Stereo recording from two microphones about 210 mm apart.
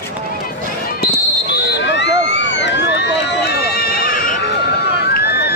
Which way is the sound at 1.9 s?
55° left (ahead or behind).